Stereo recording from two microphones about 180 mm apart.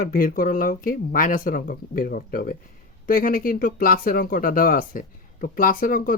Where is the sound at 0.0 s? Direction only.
50° left (ahead or behind).